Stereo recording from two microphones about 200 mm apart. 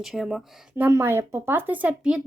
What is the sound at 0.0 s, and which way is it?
Speech, centre (ahead or behind).